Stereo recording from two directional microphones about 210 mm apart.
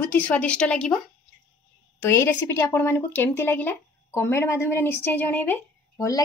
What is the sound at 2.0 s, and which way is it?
Speech, 10° left (ahead or behind).